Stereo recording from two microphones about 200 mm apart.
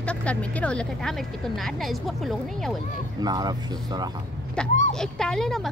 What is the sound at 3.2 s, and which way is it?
Speech, 20° right (ahead or behind).